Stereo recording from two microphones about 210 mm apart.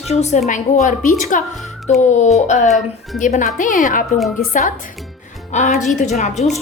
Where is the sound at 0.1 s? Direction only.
30° left (ahead or behind).